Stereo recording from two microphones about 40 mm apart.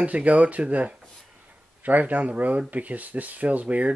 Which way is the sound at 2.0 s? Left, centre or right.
Right.